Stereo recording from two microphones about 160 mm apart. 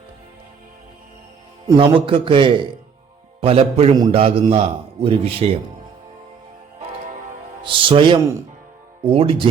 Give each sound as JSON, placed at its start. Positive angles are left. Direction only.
{"t": 1.8, "sound": "a man's voice", "side_deg": -35}
{"t": 7.6, "sound": "a man's voice", "side_deg": -30}